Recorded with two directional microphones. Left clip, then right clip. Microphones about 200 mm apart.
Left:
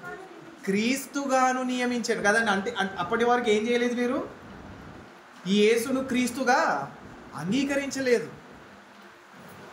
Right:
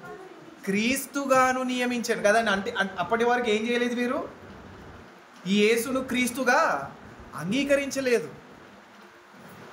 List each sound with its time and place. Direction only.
0.7 s speech: 20° right (ahead or behind)
5.4 s speech: 15° right (ahead or behind)